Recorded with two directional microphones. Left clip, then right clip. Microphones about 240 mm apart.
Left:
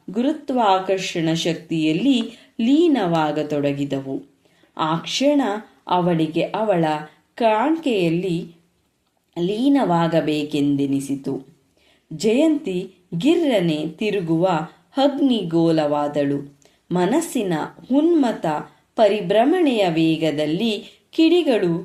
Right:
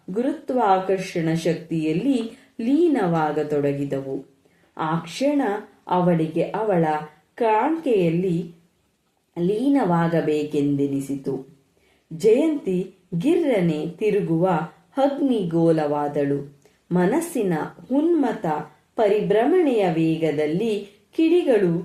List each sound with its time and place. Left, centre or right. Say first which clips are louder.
0.1 s speech: left 1 dB; left
9.3 s speech: left 2 dB; left
12.2 s speech: even; left